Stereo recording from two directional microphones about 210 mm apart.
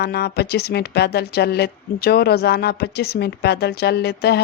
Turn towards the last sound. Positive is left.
turn(degrees=50)  # may be behind; listen again after turning